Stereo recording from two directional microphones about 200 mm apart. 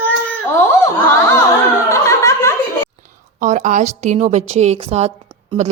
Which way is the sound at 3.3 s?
40° right (ahead or behind).